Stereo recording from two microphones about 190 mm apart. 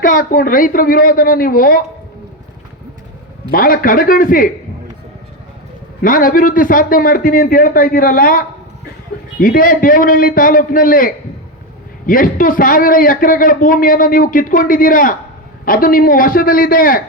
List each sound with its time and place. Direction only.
0.0 s a man's voice: 45° left (ahead or behind)
3.5 s a man's voice: 50° left (ahead or behind)
6.0 s a man's voice: 45° left (ahead or behind)